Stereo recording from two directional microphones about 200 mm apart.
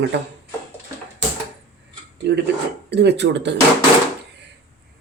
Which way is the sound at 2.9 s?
55° right (ahead or behind).